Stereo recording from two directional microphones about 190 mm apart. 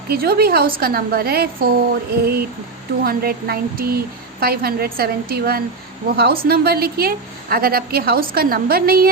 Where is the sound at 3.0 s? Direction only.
50° right (ahead or behind).